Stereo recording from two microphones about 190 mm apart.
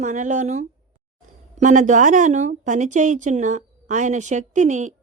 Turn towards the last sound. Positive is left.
turn(degrees=-40)  # may be behind; listen again after turning